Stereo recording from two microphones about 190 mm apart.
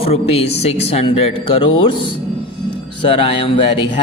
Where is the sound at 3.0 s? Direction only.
30° left (ahead or behind).